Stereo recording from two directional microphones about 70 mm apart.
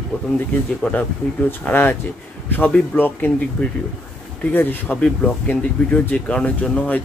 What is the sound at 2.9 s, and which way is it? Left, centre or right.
Speech, left.